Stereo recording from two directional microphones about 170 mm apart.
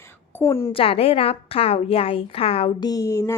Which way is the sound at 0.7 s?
35° left (ahead or behind).